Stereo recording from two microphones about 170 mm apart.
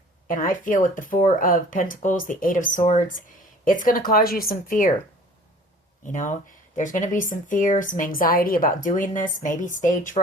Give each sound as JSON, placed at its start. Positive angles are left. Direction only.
{"t": 0.3, "sound": "speech", "side_deg": 55}
{"t": 6.1, "sound": "speech", "side_deg": 50}